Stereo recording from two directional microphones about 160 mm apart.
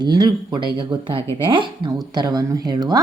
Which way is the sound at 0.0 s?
25° right (ahead or behind).